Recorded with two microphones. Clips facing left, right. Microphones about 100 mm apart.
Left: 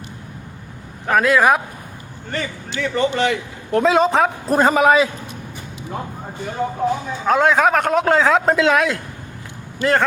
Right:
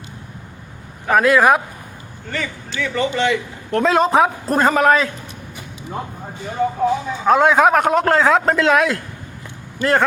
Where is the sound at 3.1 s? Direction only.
50° left (ahead or behind).